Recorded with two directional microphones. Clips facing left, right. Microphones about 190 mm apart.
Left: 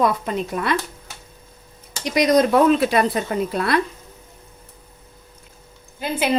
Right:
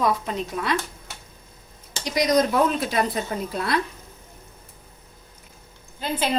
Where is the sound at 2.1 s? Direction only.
65° left (ahead or behind).